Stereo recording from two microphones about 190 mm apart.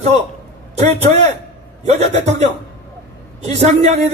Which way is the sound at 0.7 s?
35° right (ahead or behind).